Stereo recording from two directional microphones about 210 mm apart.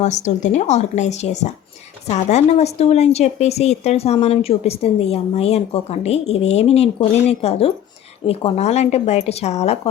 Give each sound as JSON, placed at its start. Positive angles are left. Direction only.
{"t": 0.0, "sound": "a woman's voice", "side_deg": 35}